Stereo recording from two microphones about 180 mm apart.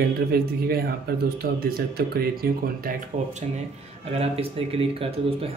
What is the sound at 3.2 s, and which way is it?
Speech, 45° right (ahead or behind).